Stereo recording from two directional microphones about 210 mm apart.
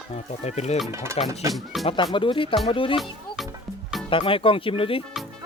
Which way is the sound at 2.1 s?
25° left (ahead or behind).